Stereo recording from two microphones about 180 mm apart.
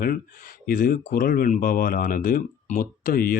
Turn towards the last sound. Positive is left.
turn(degrees=55)  # may be behind; listen again after turning